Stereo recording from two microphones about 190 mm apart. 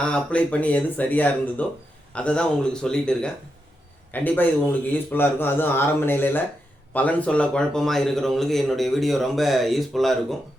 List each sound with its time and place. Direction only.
0.0 s a man's voice: 5° left (ahead or behind)